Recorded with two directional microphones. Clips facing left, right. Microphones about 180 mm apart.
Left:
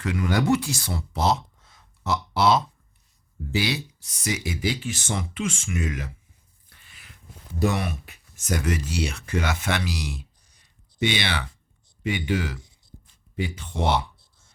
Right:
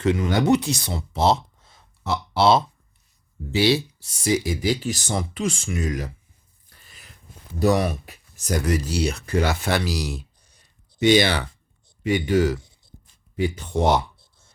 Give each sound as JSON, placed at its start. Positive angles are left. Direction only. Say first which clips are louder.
{"t": 0.0, "sound": "speech", "louder": "right 4 dB", "side_deg": -25}
{"t": 2.4, "sound": "a sound", "louder": "right 3 dB", "side_deg": -30}
{"t": 3.6, "sound": "speech", "louder": "right 10 dB", "side_deg": -30}
{"t": 6.7, "sound": "a sound", "louder": "right 3 dB", "side_deg": -40}
{"t": 7.6, "sound": "speech", "louder": "right 5 dB", "side_deg": -40}
{"t": 13.7, "sound": "speech", "louder": "right 5 dB", "side_deg": -40}